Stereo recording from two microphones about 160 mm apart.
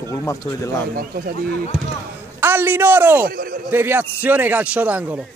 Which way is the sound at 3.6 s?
15° right (ahead or behind).